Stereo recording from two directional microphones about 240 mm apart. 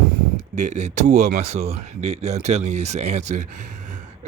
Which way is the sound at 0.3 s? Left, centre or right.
Right.